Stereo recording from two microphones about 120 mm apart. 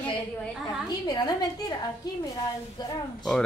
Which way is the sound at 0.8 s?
30° left (ahead or behind).